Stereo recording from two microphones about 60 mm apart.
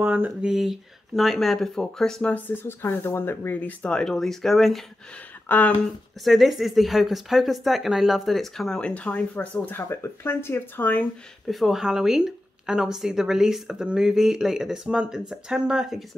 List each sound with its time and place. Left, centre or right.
0.0 s speech: right
0.4 s speech: centre
2.5 s speech: left
4.0 s speech: centre
5.5 s speech: left
6.2 s speech: centre; by 9.8 s left
9.8 s speech: left
11.4 s speech: centre